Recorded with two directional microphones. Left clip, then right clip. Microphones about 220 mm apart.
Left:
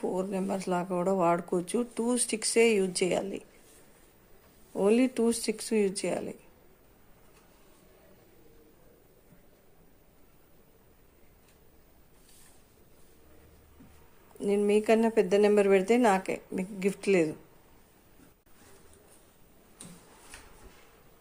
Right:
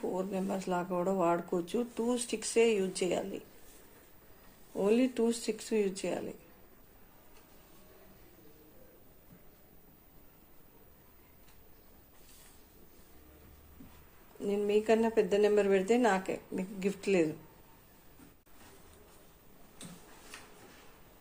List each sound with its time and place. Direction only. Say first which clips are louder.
0.0 s speech: left 3 dB; 20° left (ahead or behind)
4.7 s speech: left 4 dB; 20° left (ahead or behind)
14.4 s speech: left 4 dB; 20° left (ahead or behind)